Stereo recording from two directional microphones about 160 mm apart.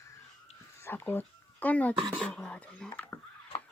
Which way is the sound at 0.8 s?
15° left (ahead or behind).